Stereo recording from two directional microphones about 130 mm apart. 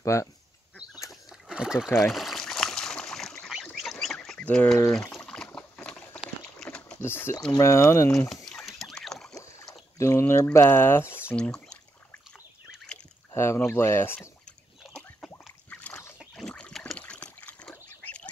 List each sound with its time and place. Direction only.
0.0 s speech: 25° left (ahead or behind)
1.3 s a sound: 5° right (ahead or behind)
5.1 s liquid: 5° left (ahead or behind)
7.0 s speech: 20° left (ahead or behind)
8.5 s rowboat: 5° left (ahead or behind)
9.4 s rowboat: 20° left (ahead or behind)
11.3 s speech: 5° left (ahead or behind)
13.3 s speech: 20° left (ahead or behind)
14.4 s rowboat: 5° left (ahead or behind)
15.7 s splash: 10° left (ahead or behind)
16.3 s a sound: 5° left (ahead or behind)